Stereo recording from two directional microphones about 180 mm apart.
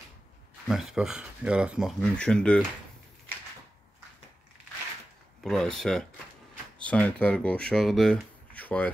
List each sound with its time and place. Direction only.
0.7 s speech: centre (ahead or behind)
5.4 s speech: centre (ahead or behind)